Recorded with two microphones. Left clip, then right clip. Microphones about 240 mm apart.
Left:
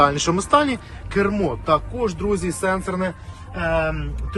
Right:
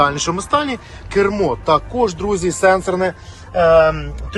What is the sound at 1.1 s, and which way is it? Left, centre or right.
Speech, right.